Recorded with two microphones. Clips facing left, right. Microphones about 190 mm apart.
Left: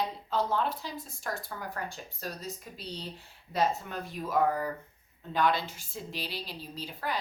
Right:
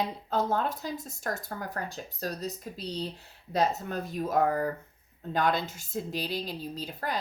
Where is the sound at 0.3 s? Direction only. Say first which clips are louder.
Right 1 dB; 45° right (ahead or behind).